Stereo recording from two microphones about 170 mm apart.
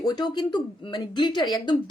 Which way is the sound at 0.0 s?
25° left (ahead or behind).